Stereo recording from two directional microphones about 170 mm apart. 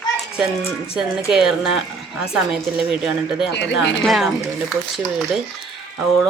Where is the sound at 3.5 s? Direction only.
90° left.